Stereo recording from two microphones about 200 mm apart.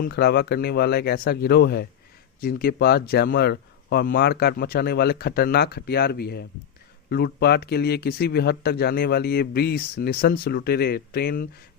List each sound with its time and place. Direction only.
0.0 s speech: 55° left (ahead or behind)